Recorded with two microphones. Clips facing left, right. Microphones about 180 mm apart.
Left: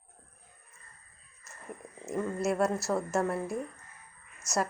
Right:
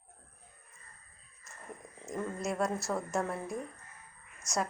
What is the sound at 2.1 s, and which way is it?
Speech, 5° left (ahead or behind).